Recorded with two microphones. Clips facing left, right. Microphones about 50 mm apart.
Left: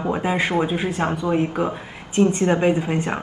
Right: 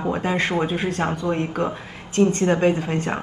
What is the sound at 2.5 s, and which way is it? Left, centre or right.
Speech, centre.